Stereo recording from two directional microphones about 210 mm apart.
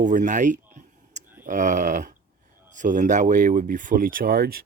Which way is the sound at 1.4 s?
40° right (ahead or behind).